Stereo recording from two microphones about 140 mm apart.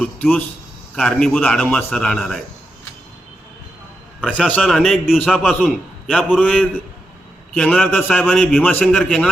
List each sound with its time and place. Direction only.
0.0 s a man's voice: 10° left (ahead or behind)
4.2 s a man's voice: 5° left (ahead or behind)